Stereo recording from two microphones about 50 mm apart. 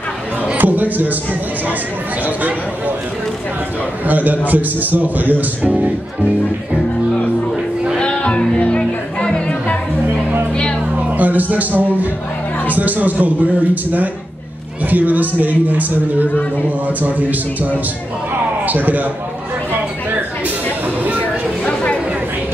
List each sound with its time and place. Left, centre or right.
0.6 s speech: right
4.0 s speech: right
8.0 s music: centre
11.1 s music: right
11.5 s speech: right
18.7 s speech: right
20.1 s a sound: right
21.6 s chatter: left